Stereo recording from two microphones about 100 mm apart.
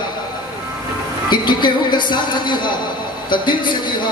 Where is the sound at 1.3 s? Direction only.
50° left (ahead or behind).